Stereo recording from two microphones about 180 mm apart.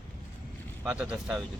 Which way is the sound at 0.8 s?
5° right (ahead or behind).